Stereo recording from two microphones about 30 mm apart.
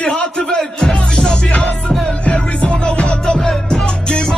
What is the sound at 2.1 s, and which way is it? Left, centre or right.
Music, left.